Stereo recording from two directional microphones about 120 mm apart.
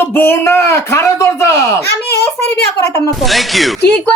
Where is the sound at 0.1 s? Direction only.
15° left (ahead or behind).